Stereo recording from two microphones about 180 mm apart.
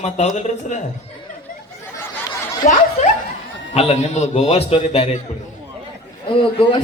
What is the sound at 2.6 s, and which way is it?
Speech, 45° left (ahead or behind).